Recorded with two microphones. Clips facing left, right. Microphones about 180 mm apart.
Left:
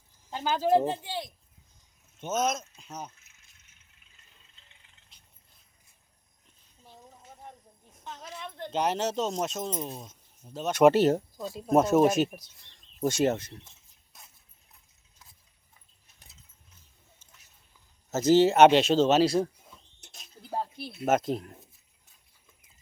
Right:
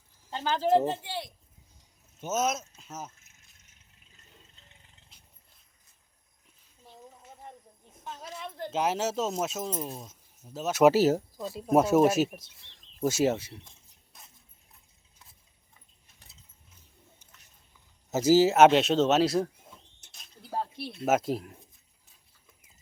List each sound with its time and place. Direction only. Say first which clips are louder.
0.3 s speech: even; 10° left (ahead or behind)
2.2 s speech: even; 5° right (ahead or behind)
3.2 s a sound: right 2 dB; 45° right (ahead or behind)
8.0 s speech: right 1 dB; 10° right (ahead or behind)
13.7 s a sound: right 2 dB; centre (ahead or behind)
18.1 s speech: even; 10° right (ahead or behind)
21.1 s speech: even; 5° right (ahead or behind)